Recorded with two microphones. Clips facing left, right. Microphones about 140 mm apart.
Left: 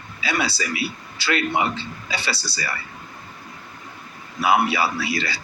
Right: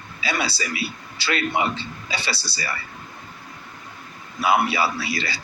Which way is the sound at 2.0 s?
30° right (ahead or behind).